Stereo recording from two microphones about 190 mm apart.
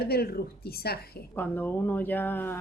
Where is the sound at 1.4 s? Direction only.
10° left (ahead or behind).